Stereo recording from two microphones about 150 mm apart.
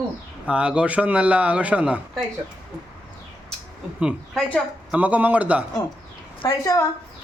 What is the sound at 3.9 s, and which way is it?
A man's voice, 5° right (ahead or behind).